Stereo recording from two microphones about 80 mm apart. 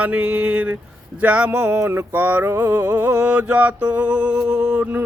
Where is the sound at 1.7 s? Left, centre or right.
Right.